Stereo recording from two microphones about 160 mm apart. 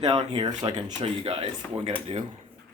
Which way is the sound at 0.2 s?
30° right (ahead or behind).